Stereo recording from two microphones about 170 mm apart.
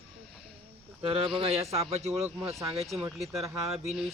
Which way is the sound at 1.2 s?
35° right (ahead or behind).